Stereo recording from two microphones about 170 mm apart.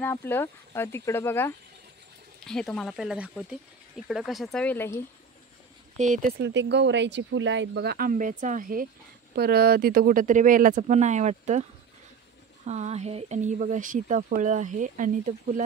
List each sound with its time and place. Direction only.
0.0 s speech: 10° left (ahead or behind)
5.9 s speech: 45° right (ahead or behind)
6.4 s speech: 90° right; by 8.8 s 55° right (ahead or behind)
9.3 s speech: 65° right (ahead or behind); by 11.6 s 45° right (ahead or behind)
12.6 s speech: 40° right (ahead or behind)